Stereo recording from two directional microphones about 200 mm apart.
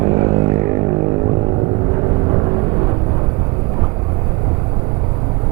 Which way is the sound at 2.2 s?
25° right (ahead or behind).